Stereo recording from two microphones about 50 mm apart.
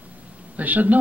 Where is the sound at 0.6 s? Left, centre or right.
Right.